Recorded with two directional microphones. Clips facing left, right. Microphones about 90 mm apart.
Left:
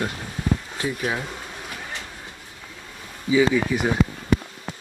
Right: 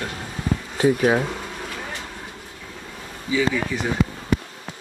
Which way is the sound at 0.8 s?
35° right (ahead or behind).